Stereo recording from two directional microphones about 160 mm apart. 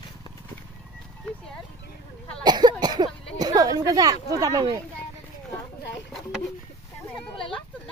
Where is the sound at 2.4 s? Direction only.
25° right (ahead or behind).